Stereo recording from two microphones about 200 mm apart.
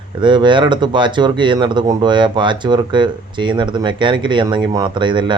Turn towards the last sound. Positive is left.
turn(degrees=-25)  # may be behind; listen again after turning